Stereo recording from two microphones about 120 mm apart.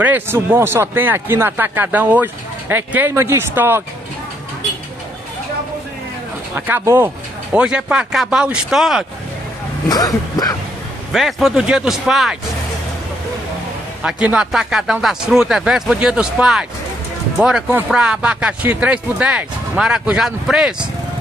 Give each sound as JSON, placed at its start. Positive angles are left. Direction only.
{"t": 0.0, "sound": "speech", "side_deg": -15}
{"t": 6.8, "sound": "speech", "side_deg": -25}
{"t": 7.5, "sound": "speech", "side_deg": -10}
{"t": 9.8, "sound": "speech", "side_deg": 30}
{"t": 11.1, "sound": "speech", "side_deg": 0}
{"t": 14.0, "sound": "speech", "side_deg": -10}